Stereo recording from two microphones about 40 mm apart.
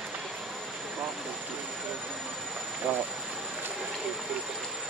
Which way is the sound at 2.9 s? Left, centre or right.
Right.